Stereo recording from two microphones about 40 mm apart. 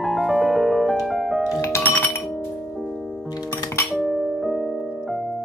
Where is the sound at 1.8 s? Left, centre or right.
Left.